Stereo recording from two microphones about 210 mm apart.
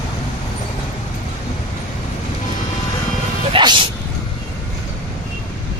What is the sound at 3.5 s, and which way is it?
Vehicle, 20° right (ahead or behind).